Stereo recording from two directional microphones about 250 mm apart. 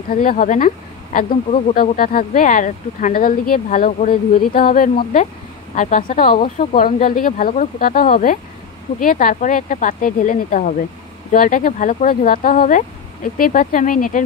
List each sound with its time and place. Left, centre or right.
0.1 s speech: left
6.3 s speech: left
6.8 s speech: left